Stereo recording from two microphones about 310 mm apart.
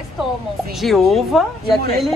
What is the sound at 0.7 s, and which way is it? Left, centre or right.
Speech, centre.